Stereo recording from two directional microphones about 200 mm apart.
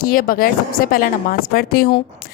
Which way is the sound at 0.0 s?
45° left (ahead or behind).